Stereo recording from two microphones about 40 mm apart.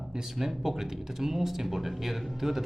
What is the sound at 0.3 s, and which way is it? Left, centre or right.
Speech, centre.